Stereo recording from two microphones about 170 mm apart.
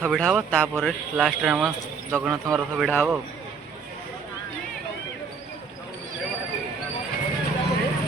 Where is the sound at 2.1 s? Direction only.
15° right (ahead or behind).